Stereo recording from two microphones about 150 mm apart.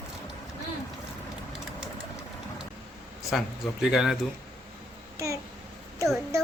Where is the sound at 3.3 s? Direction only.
Centre (ahead or behind).